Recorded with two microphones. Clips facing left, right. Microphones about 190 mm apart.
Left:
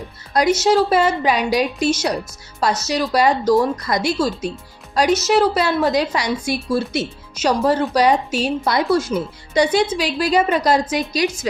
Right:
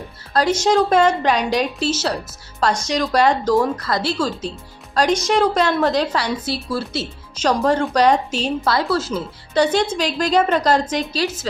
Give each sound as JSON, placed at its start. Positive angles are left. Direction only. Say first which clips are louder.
{"t": 0.3, "sound": "speech", "louder": "left 1 dB", "side_deg": 10}